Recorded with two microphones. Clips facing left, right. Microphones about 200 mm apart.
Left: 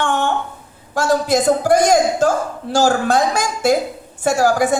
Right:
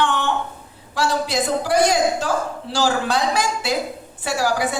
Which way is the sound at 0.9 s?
45° left (ahead or behind).